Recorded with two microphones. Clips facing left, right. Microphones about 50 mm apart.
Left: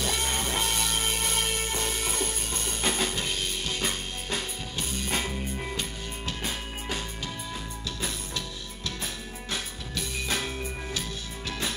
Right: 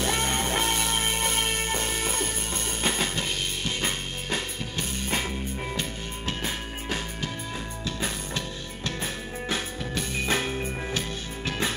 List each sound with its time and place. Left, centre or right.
0.0 s music: right
5.8 s music: right
7.8 s music: right